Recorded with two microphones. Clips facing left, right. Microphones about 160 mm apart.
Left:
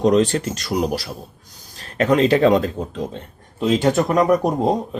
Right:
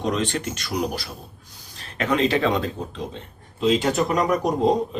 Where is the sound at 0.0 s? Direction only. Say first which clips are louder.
Left 8 dB; 40° left (ahead or behind).